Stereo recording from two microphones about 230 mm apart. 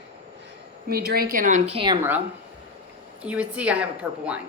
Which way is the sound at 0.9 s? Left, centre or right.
Right.